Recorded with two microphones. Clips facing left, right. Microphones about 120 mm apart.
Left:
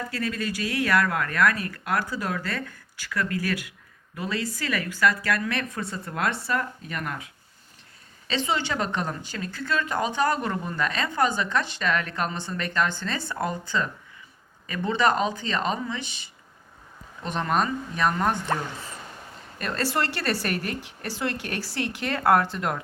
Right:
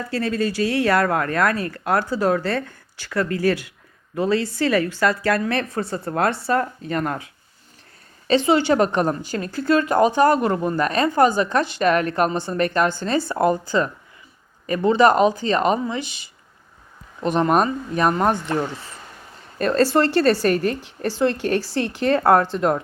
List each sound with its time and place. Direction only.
0.1 s speech: 35° right (ahead or behind)
8.3 s a woman's voice: 40° right (ahead or behind)
16.0 s speech: 35° left (ahead or behind)
17.2 s a woman's voice: 40° right (ahead or behind)
19.5 s speech: 35° right (ahead or behind)